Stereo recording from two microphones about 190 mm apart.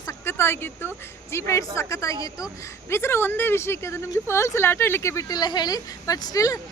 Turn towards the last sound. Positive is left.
turn(degrees=20)  # may be behind; listen again after turning